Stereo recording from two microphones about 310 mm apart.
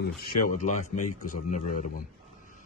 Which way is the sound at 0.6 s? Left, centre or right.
Left.